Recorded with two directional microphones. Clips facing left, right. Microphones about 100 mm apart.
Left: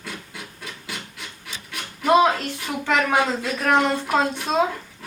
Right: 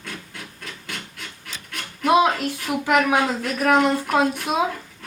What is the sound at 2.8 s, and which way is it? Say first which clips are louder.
A woman's voice: right 1 dB; 10° right (ahead or behind).